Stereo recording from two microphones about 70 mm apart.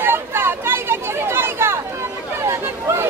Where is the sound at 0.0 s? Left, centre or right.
Right.